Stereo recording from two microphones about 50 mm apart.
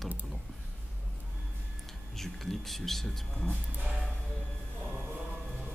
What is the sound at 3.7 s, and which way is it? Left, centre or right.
Music, right.